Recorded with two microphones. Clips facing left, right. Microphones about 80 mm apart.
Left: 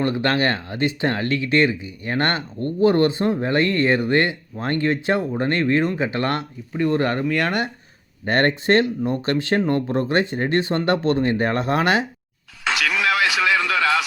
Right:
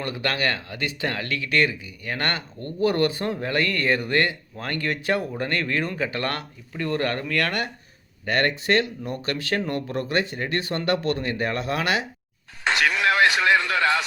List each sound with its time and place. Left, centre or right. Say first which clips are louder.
0.0 s speech: left 6 dB; left
8.2 s speech: left 4 dB; left
12.6 s a sound: even; left